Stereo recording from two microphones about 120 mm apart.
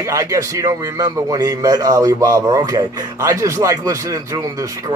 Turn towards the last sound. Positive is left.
turn(degrees=-30)  # may be behind; listen again after turning